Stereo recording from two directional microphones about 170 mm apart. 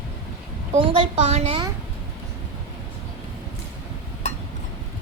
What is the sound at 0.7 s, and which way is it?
Speech, 30° right (ahead or behind).